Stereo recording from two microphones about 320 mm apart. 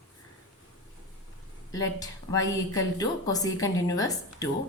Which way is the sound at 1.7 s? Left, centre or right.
Centre.